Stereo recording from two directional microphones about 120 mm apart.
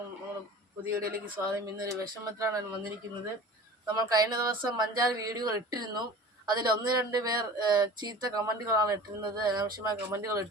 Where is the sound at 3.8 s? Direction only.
35° right (ahead or behind).